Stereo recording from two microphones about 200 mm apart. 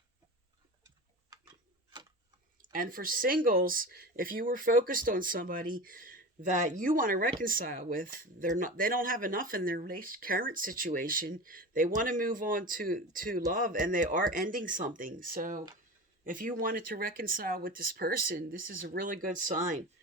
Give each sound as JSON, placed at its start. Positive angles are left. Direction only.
{"t": 2.6, "sound": "speech", "side_deg": -45}